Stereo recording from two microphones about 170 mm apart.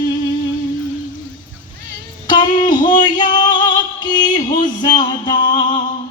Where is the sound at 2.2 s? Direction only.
25° left (ahead or behind).